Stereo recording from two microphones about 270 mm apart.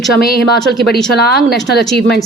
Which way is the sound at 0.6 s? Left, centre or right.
Centre.